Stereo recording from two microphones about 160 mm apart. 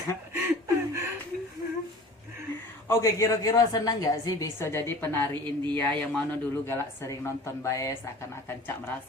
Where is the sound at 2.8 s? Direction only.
20° left (ahead or behind).